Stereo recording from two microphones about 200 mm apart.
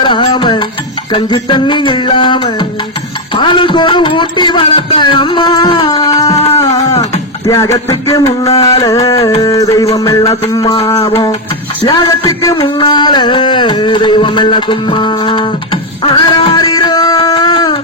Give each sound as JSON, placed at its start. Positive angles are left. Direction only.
{"t": 0.0, "sound": "music", "side_deg": 25}
{"t": 1.1, "sound": "speech", "side_deg": 25}
{"t": 6.5, "sound": "a sound", "side_deg": 15}
{"t": 7.4, "sound": "music", "side_deg": 15}
{"t": 10.5, "sound": "speech", "side_deg": 20}
{"t": 11.8, "sound": "a sound", "side_deg": 20}